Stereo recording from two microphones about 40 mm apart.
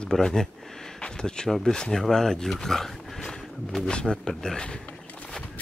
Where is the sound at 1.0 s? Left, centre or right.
Centre.